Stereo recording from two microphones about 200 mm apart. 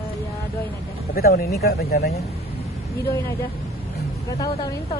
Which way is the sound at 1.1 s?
50° left (ahead or behind).